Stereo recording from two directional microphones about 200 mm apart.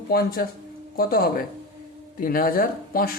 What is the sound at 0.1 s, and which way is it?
Speech, 50° left (ahead or behind).